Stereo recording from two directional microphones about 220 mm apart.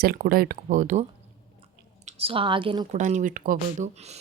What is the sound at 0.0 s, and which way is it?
Speech, 45° right (ahead or behind).